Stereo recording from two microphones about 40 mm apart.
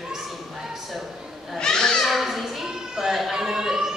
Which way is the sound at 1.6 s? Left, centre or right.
Centre.